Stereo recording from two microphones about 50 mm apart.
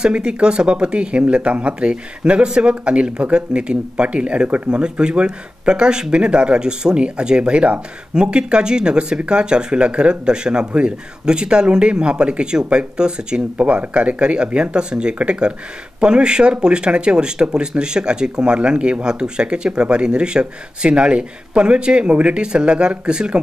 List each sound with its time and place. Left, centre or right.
0.0 s speech: centre